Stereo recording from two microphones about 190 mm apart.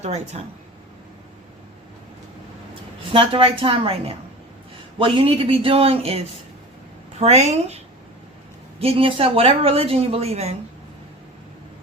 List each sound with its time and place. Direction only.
0.4 s a woman's voice: 30° right (ahead or behind)
3.1 s a man's voice: 30° right (ahead or behind)
8.8 s a woman's voice: 30° right (ahead or behind)